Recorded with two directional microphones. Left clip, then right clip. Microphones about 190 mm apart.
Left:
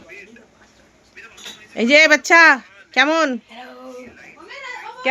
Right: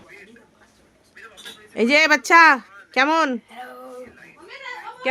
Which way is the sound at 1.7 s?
25° right (ahead or behind).